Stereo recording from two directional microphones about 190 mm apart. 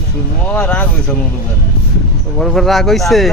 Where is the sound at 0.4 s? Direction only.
5° left (ahead or behind).